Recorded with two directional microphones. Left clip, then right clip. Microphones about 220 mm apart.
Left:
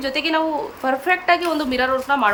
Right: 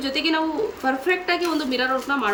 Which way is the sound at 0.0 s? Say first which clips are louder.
Left 2 dB; 10° left (ahead or behind).